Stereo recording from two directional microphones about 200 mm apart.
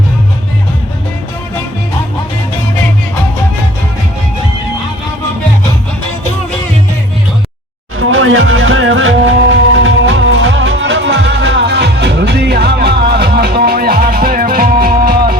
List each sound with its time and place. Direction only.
7.9 s music: 85° right; by 15.4 s 50° right (ahead or behind)